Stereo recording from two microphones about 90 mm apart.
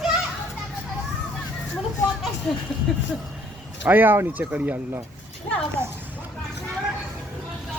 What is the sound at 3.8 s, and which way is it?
Speech, 20° right (ahead or behind).